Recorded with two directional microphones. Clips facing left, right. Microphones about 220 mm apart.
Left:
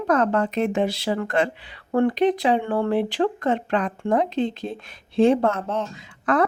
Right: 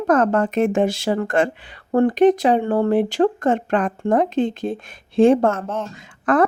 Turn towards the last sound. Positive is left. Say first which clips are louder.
# right 3 dB
turn(degrees=-50)  # may be behind; listen again after turning